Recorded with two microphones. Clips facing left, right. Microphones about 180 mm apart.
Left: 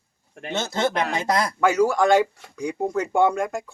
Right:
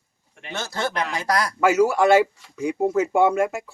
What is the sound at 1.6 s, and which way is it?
Speech, 5° right (ahead or behind).